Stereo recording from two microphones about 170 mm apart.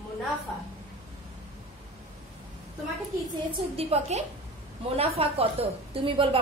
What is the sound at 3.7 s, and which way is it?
A woman's voice, 40° right (ahead or behind).